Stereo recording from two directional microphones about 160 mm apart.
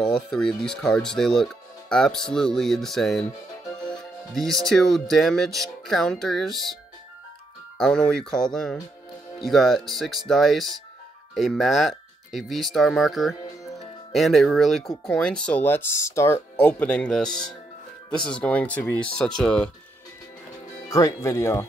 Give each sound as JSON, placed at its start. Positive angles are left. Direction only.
{"t": 0.0, "sound": "speech", "side_deg": 5}
{"t": 4.3, "sound": "speech", "side_deg": 0}
{"t": 20.9, "sound": "speech", "side_deg": 20}